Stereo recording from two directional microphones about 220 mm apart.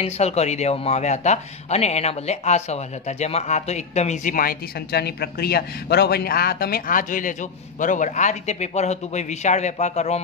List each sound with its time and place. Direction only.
0.0 s speech: 30° left (ahead or behind)